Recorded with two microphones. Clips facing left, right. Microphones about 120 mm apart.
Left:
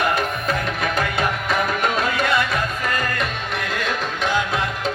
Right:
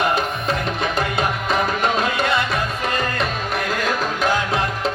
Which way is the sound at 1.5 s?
25° right (ahead or behind).